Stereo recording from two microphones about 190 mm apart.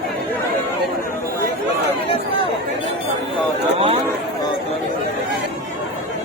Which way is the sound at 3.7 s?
30° right (ahead or behind).